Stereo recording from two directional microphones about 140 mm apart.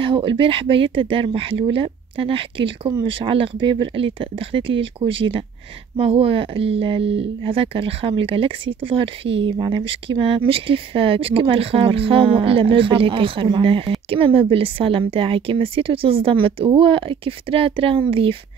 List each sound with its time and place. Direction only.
0.0 s speech: 40° right (ahead or behind)